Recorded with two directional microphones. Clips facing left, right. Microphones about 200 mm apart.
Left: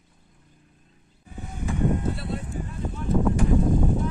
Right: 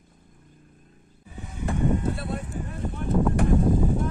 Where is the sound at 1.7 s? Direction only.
55° right (ahead or behind).